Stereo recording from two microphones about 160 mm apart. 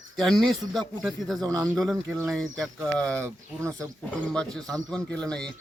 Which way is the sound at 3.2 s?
20° right (ahead or behind).